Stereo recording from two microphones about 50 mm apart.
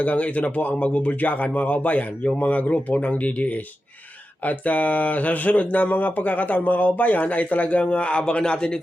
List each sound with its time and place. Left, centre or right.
0.0 s speech: left